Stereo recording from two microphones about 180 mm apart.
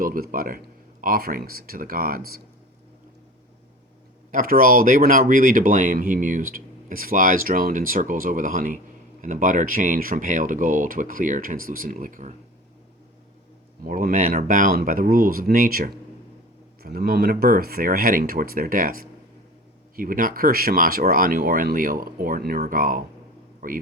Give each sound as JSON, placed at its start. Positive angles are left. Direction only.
{"t": 0.0, "sound": "speech", "side_deg": -50}
{"t": 4.3, "sound": "speech", "side_deg": -50}
{"t": 13.8, "sound": "a man's voice", "side_deg": -50}